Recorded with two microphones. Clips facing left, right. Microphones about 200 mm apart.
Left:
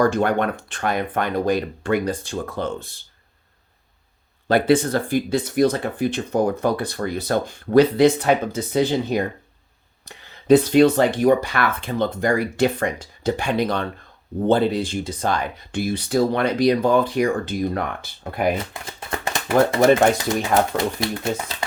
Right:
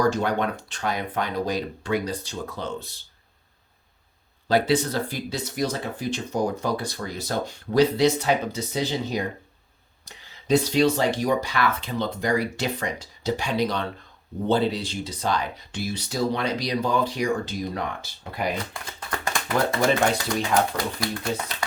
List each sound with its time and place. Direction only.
0.0 s speech: 55° left (ahead or behind)
4.4 s speech: 55° left (ahead or behind)
18.5 s speech: 25° left (ahead or behind)